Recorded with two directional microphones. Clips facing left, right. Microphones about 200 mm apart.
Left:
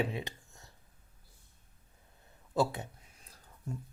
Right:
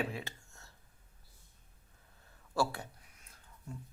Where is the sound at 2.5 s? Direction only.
20° left (ahead or behind).